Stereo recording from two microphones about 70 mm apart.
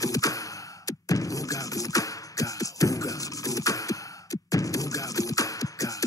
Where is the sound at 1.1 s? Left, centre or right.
Left.